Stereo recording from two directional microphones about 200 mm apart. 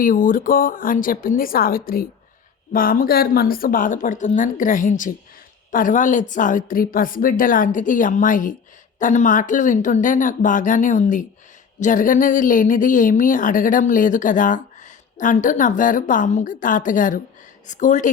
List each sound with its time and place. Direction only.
0.0 s a woman's voice: 45° left (ahead or behind)